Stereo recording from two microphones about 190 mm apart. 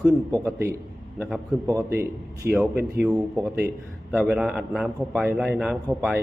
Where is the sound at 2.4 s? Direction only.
55° right (ahead or behind).